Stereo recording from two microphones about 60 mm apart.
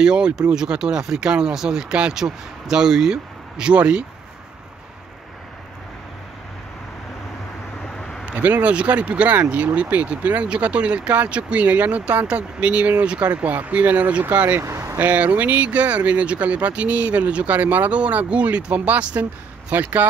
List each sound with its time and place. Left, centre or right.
0.0 s speech: centre
7.9 s a sound: centre
8.3 s speech: right
14.6 s speech: right
15.0 s speech: right